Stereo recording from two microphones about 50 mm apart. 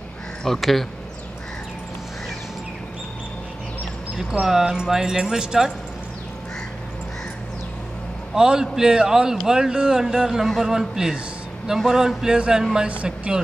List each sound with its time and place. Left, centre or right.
0.6 s speech: centre
4.5 s speech: centre
8.4 s a woman's voice: centre